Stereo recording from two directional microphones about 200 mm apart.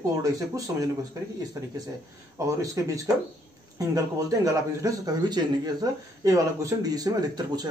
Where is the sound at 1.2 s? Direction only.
15° right (ahead or behind).